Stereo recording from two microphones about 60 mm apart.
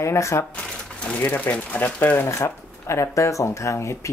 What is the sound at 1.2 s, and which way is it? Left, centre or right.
Speech, left.